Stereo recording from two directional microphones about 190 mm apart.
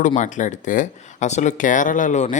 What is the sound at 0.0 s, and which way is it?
Speech, 40° left (ahead or behind).